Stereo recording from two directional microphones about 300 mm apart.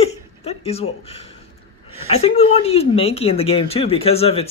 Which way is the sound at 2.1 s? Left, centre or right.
Centre.